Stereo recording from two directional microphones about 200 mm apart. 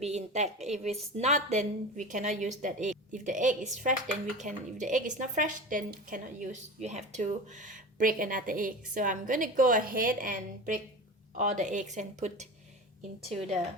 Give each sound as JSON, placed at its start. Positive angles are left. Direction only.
{"t": 0.0, "sound": "a woman's voice", "side_deg": -35}